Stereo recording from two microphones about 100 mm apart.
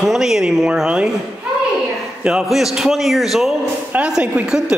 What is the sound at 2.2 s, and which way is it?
A man's voice, 5° right (ahead or behind).